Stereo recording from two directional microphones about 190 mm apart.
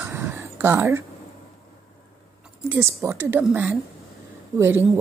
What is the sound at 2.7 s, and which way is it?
A woman's voice, 10° right (ahead or behind).